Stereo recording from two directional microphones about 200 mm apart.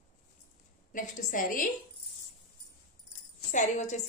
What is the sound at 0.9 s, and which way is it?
Speech, 40° left (ahead or behind).